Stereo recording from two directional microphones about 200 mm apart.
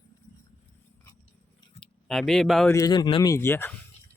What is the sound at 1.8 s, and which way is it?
Speech, centre (ahead or behind).